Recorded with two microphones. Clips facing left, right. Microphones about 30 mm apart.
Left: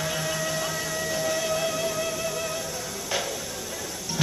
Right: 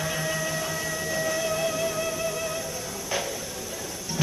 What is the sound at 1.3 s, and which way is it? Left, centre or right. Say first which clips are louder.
Music: even; centre.